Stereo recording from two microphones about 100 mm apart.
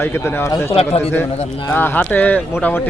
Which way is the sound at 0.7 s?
80° left.